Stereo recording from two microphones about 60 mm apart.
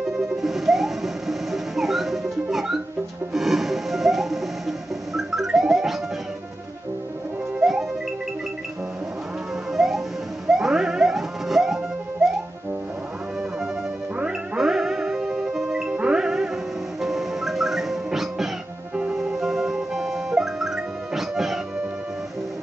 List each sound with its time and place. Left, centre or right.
0.0 s music: centre
3.3 s music: centre
9.7 s music: centre
14.1 s music: centre
14.6 s music: centre
18.9 s music: centre